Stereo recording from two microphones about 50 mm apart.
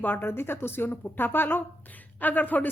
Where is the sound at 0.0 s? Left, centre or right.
Left.